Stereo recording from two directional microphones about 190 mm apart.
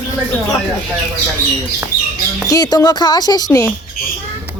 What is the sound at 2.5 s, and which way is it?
Speech, 20° left (ahead or behind).